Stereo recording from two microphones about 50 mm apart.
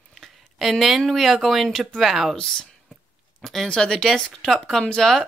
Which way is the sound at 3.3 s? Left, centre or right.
Centre.